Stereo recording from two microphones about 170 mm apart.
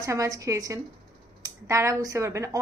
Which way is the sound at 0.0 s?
20° right (ahead or behind).